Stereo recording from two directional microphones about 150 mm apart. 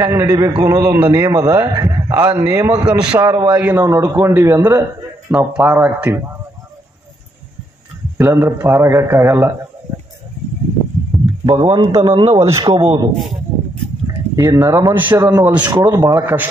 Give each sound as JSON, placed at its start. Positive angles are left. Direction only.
{"t": 0.0, "sound": "a man's voice", "side_deg": -20}
{"t": 8.2, "sound": "a man's voice", "side_deg": -15}
{"t": 11.1, "sound": "a sound", "side_deg": 0}
{"t": 11.6, "sound": "a man's voice", "side_deg": -30}
{"t": 12.4, "sound": "a man's voice", "side_deg": -20}
{"t": 12.6, "sound": "a man's voice", "side_deg": -35}
{"t": 13.1, "sound": "speech", "side_deg": 0}
{"t": 14.3, "sound": "a man's voice", "side_deg": -20}